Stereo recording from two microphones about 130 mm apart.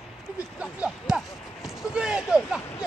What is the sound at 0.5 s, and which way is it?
Speech, 10° right (ahead or behind).